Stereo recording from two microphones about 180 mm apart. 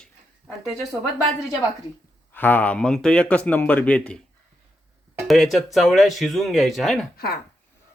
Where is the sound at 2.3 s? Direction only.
10° left (ahead or behind).